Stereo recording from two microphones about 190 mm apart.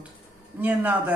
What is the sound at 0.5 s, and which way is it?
Speech, 10° right (ahead or behind).